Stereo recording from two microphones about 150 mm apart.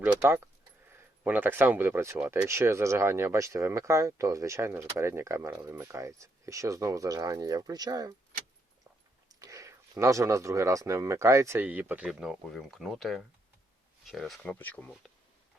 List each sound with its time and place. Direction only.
0.0 s speech: 15° right (ahead or behind)
9.3 s speech: 20° right (ahead or behind); by 14.8 s 10° left (ahead or behind)